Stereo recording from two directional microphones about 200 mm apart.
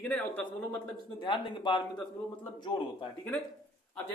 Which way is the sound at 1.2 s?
25° left (ahead or behind).